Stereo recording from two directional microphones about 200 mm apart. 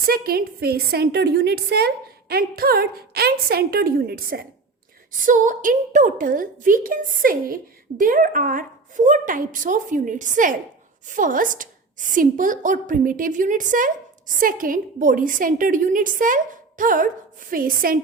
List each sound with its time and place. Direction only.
0.0 s a woman's voice: 50° right (ahead or behind)